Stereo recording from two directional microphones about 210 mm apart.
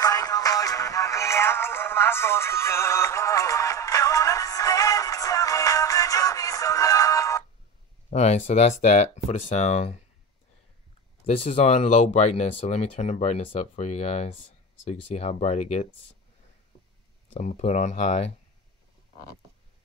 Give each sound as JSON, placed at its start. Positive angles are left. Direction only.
{"t": 0.0, "sound": "music", "side_deg": 15}
{"t": 8.1, "sound": "speech", "side_deg": 30}
{"t": 11.4, "sound": "speech", "side_deg": 30}
{"t": 17.3, "sound": "speech", "side_deg": 35}